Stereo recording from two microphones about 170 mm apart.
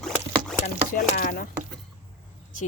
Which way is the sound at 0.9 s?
55° left (ahead or behind).